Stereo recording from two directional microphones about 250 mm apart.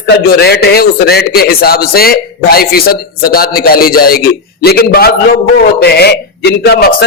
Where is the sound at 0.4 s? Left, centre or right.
Left.